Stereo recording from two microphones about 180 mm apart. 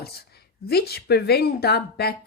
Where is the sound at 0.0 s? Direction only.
60° left (ahead or behind).